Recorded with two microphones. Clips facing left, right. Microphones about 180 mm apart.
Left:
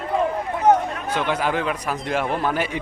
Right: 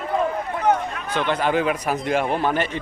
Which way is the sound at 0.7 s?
40° left (ahead or behind).